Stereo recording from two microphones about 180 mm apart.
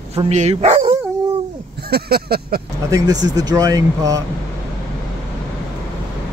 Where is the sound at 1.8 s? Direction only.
60° right (ahead or behind).